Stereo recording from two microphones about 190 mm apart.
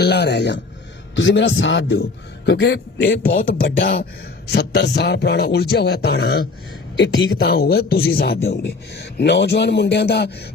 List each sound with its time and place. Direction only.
0.0 s speech: 60° left (ahead or behind)
1.1 s a man's voice: 75° left (ahead or behind)
2.5 s speech: 60° left (ahead or behind)